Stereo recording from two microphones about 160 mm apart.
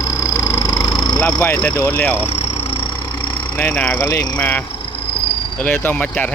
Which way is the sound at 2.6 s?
35° left (ahead or behind).